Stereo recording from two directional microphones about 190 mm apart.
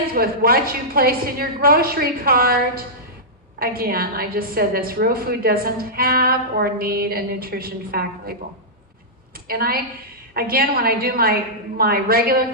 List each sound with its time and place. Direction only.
0.1 s a woman's voice: 50° right (ahead or behind)
9.5 s a woman's voice: 50° right (ahead or behind)